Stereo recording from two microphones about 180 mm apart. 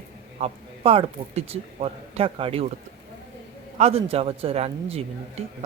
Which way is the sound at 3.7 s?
35° right (ahead or behind).